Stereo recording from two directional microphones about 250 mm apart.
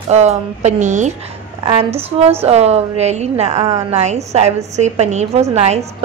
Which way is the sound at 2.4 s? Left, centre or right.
Right.